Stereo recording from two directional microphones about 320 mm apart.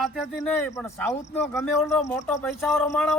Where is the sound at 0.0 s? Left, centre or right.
Centre.